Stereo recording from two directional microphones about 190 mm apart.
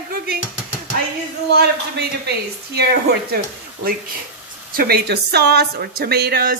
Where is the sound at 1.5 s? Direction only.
60° right (ahead or behind).